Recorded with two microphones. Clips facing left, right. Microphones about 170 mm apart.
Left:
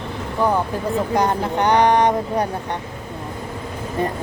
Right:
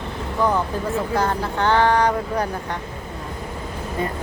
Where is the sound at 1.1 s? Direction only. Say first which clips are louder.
Left 4 dB; 20° left (ahead or behind).